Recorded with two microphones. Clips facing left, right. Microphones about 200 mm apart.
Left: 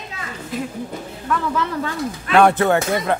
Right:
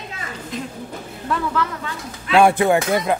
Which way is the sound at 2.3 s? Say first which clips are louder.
Even; 10° right (ahead or behind).